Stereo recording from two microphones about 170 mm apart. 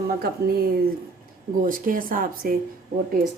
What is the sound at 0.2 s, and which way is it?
Speech, 65° right (ahead or behind).